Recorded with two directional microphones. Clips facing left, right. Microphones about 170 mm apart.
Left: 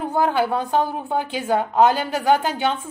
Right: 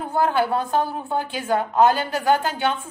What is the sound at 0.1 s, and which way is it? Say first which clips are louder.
A woman's voice: even; 15° left (ahead or behind).